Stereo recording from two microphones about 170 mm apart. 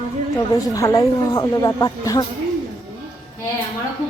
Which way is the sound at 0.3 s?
20° left (ahead or behind).